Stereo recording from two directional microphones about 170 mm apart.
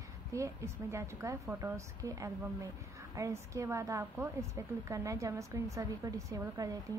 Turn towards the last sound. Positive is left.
turn(degrees=-20)  # may be behind; listen again after turning